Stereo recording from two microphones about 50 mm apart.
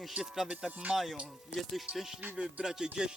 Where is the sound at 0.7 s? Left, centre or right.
Right.